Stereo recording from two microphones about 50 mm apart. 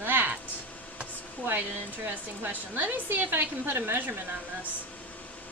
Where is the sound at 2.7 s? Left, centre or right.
Right.